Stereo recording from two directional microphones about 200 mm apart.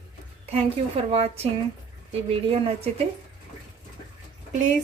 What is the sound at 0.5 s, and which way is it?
A woman's voice, 30° right (ahead or behind).